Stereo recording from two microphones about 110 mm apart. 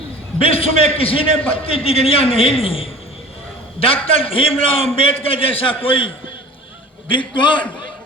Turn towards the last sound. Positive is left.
turn(degrees=50)  # may be behind; listen again after turning